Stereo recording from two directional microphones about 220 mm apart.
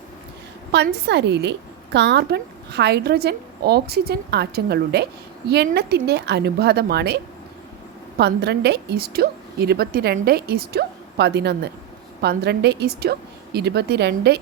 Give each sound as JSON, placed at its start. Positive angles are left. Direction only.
{"t": 0.7, "sound": "a woman's voice", "side_deg": -50}
{"t": 8.2, "sound": "a woman's voice", "side_deg": -50}